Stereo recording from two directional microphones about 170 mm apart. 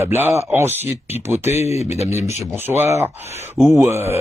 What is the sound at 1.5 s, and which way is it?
Speech, 40° left (ahead or behind).